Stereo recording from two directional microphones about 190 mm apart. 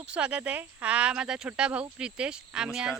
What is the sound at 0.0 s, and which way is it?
Speech, 5° right (ahead or behind).